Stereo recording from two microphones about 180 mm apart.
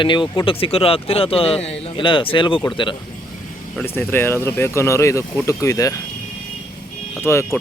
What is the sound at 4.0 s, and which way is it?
Speech, 10° left (ahead or behind).